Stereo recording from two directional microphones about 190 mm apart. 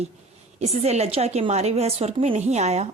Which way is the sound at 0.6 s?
35° right (ahead or behind).